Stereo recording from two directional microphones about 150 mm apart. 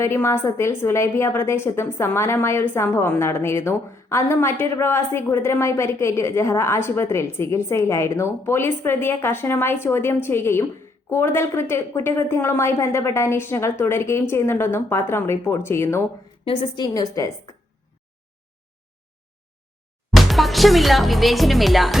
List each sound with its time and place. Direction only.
0.0 s a woman's voice: 15° left (ahead or behind)
16.5 s a woman's voice: 30° left (ahead or behind)
20.1 s speech: centre (ahead or behind)